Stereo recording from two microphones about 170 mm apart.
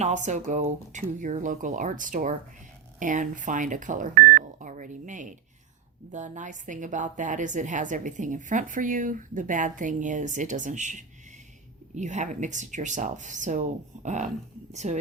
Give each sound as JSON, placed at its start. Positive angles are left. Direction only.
{"t": 0.0, "sound": "a woman's voice", "side_deg": -45}